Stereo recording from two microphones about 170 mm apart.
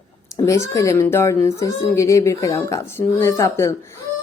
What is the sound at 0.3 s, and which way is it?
Speech, 15° left (ahead or behind).